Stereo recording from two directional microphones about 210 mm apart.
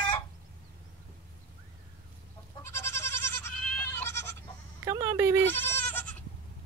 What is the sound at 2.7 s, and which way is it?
Goat, 10° left (ahead or behind).